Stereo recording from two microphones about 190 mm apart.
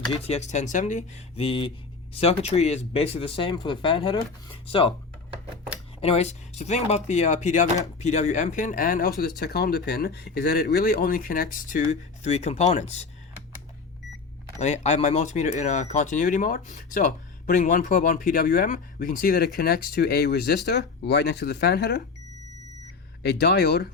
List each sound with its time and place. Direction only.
0.3 s speech: 35° left (ahead or behind)
6.0 s speech: 35° left (ahead or behind)
14.6 s speech: 35° left (ahead or behind); by 22.0 s 60° left (ahead or behind)
23.2 s speech: 60° left (ahead or behind)